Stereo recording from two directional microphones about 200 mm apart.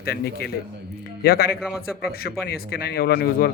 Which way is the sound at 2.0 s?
50° left (ahead or behind).